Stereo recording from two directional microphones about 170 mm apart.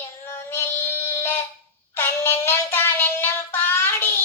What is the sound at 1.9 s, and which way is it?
Music, 15° left (ahead or behind).